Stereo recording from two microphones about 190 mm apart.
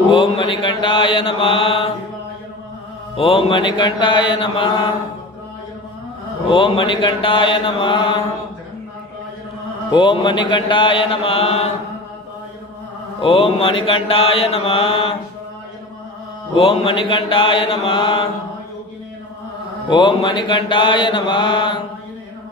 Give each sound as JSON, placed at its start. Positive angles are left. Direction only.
{"t": 0.1, "sound": "mantra", "side_deg": 25}
{"t": 3.2, "sound": "mantra", "side_deg": 30}
{"t": 6.5, "sound": "mantra", "side_deg": 25}
{"t": 9.8, "sound": "mantra", "side_deg": 25}
{"t": 13.2, "sound": "mantra", "side_deg": 30}
{"t": 16.5, "sound": "mantra", "side_deg": 30}
{"t": 19.9, "sound": "mantra", "side_deg": 25}